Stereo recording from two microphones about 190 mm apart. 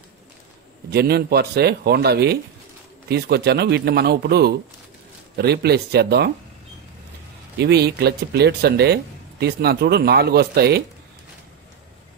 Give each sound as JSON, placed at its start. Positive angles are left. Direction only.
{"t": 0.8, "sound": "speech", "side_deg": -55}
{"t": 7.5, "sound": "speech", "side_deg": -60}